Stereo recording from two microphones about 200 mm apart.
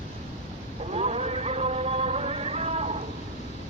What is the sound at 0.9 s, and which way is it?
Music, 30° right (ahead or behind).